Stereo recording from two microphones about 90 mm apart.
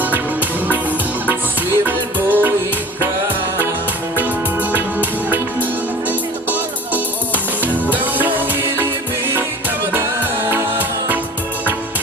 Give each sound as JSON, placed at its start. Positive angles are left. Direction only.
{"t": 1.3, "sound": "music", "side_deg": -20}
{"t": 4.7, "sound": "music", "side_deg": -20}